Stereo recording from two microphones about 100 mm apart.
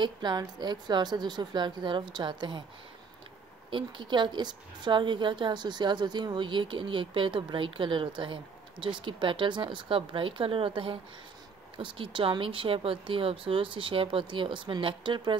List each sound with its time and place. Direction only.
0.0 s a woman's voice: 45° right (ahead or behind)
3.7 s a woman's voice: 50° right (ahead or behind)